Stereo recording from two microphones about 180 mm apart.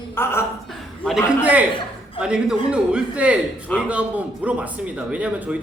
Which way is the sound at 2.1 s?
5° right (ahead or behind).